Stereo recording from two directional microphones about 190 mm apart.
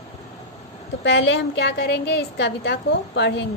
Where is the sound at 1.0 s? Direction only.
70° left (ahead or behind).